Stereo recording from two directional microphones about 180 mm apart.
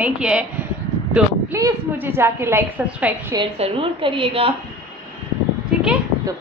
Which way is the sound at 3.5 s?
30° right (ahead or behind).